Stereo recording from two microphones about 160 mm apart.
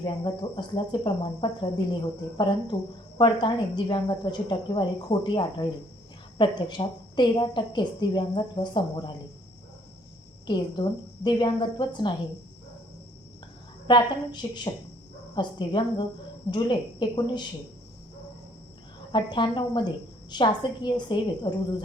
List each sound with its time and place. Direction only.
0.0 s a woman's voice: 30° left (ahead or behind)
10.4 s a woman's voice: 30° left (ahead or behind)
13.8 s a woman's voice: 30° left (ahead or behind)
19.1 s a woman's voice: 30° left (ahead or behind)